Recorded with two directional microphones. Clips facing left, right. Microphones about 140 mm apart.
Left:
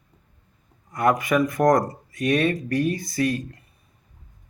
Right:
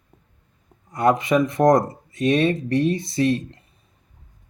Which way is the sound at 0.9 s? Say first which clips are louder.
Right 2 dB; 25° right (ahead or behind).